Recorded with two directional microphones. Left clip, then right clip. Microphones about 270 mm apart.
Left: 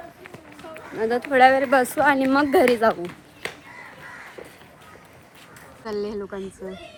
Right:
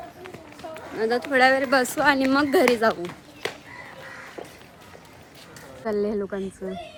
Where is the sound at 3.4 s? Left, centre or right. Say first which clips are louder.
Right 2 dB; right.